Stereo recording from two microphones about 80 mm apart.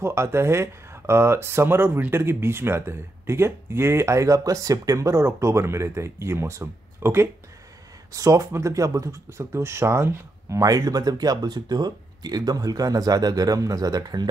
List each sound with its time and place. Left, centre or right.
0.0 s speech: right
8.1 s speech: right
10.6 s speech: right